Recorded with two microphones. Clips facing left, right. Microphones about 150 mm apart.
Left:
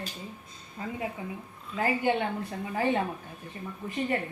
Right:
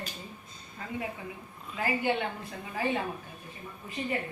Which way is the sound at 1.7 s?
35° left (ahead or behind).